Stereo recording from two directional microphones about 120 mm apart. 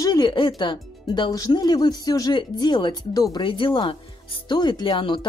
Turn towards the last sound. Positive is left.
turn(degrees=40)  # may be behind; listen again after turning